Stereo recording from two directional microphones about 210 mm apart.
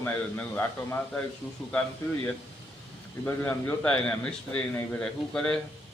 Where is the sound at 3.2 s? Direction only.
10° left (ahead or behind).